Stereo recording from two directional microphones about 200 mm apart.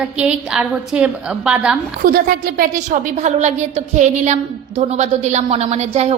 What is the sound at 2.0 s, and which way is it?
A woman's voice, 45° right (ahead or behind).